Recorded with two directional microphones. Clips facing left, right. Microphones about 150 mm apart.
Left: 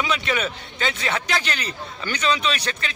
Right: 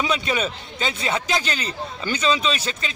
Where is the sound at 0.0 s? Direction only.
25° right (ahead or behind).